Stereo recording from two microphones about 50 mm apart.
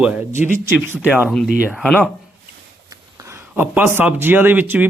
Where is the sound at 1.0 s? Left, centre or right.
Right.